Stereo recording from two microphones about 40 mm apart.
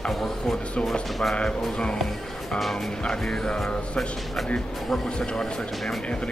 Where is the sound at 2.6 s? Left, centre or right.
Centre.